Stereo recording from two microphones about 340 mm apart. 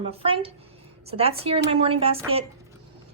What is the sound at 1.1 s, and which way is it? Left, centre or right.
A woman's voice, centre.